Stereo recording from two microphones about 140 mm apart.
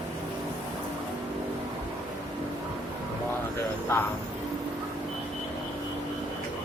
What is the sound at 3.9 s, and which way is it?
Speech, 20° left (ahead or behind).